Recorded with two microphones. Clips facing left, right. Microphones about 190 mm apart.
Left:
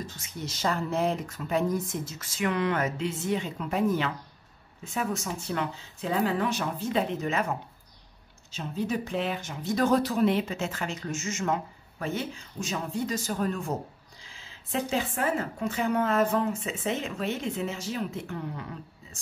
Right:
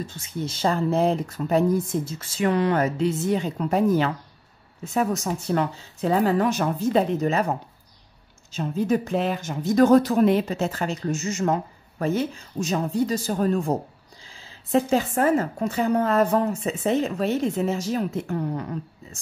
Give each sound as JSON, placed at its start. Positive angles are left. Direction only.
{"t": 0.0, "sound": "speech", "side_deg": -30}